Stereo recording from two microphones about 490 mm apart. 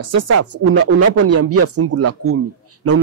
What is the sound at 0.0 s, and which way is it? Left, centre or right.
A man's voice, right.